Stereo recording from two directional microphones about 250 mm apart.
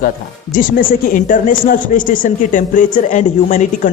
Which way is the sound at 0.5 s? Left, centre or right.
Left.